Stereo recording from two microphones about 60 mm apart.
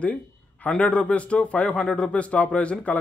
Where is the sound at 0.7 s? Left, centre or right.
Left.